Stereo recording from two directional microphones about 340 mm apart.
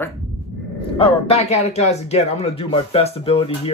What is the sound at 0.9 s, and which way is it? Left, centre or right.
Speech, centre.